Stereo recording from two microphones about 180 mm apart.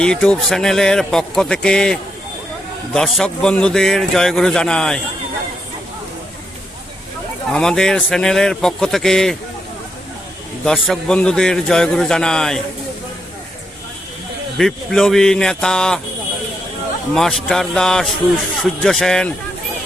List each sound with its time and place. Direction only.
0.0 s a man's voice: 5° left (ahead or behind)
7.5 s a man's voice: 5° left (ahead or behind)
10.7 s a man's voice: 5° left (ahead or behind)
14.6 s a man's voice: centre (ahead or behind)
17.2 s a man's voice: centre (ahead or behind)